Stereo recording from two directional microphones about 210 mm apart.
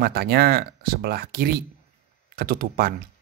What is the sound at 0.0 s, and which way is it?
A man's voice, 50° right (ahead or behind).